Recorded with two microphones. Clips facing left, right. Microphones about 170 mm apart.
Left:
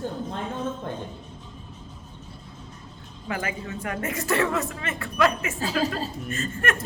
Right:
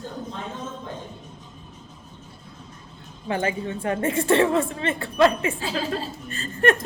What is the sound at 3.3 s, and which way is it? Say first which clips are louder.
A woman's voice: right 5 dB; 30° right (ahead or behind).